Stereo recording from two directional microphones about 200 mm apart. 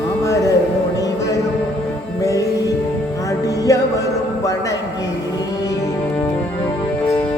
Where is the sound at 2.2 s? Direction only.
15° left (ahead or behind).